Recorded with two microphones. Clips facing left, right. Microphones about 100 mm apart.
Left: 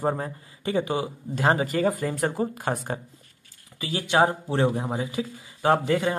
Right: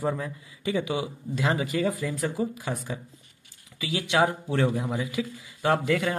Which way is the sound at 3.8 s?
40° left (ahead or behind).